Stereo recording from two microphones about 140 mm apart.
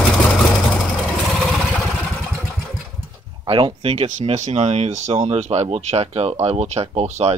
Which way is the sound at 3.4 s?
40° right (ahead or behind).